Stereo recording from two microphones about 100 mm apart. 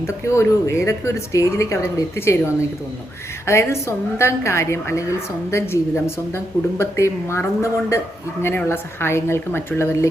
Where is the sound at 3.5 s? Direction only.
25° left (ahead or behind).